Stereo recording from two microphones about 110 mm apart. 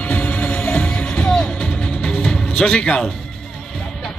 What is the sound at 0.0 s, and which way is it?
Music, 10° left (ahead or behind).